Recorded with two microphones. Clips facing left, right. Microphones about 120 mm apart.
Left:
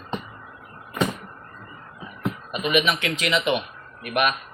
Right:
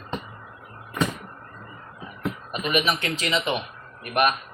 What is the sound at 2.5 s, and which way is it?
Speech, 40° right (ahead or behind).